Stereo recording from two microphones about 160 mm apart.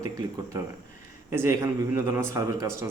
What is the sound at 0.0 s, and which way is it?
A man's voice, 20° right (ahead or behind).